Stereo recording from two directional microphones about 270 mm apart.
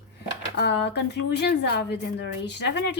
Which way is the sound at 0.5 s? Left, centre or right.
Left.